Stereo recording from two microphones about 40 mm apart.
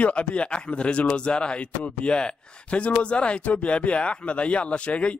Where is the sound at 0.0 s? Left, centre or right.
Left.